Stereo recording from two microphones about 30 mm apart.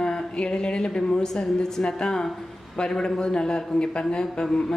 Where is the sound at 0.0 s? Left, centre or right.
Left.